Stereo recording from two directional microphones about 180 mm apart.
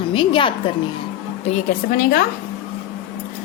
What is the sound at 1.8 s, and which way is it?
Speech, 55° left (ahead or behind).